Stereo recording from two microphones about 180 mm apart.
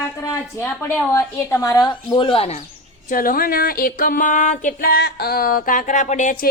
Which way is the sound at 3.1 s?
50° left (ahead or behind).